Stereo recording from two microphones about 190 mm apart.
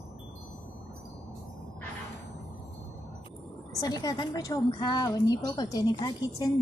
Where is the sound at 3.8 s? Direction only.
20° left (ahead or behind).